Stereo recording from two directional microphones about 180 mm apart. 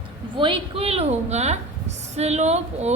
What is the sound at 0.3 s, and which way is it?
A woman's voice, 30° right (ahead or behind).